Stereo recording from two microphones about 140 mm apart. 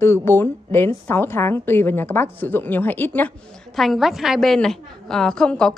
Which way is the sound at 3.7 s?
Centre (ahead or behind).